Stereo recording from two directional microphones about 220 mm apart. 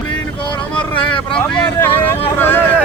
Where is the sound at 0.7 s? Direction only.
5° left (ahead or behind).